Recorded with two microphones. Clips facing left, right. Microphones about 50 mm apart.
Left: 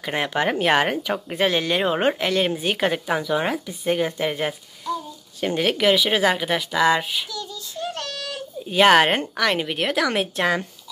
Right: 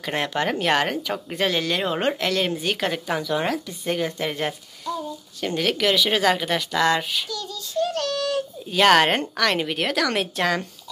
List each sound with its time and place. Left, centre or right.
0.0 s speech: centre
5.4 s speech: left